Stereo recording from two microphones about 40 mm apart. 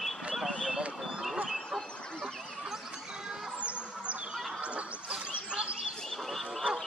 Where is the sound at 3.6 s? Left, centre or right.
Right.